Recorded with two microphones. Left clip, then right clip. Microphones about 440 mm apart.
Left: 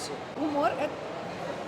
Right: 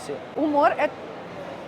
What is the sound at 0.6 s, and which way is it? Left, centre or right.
Speech, right.